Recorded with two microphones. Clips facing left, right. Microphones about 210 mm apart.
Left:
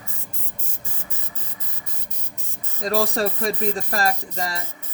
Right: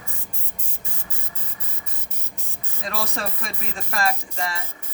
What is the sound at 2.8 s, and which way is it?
Speech, 35° left (ahead or behind).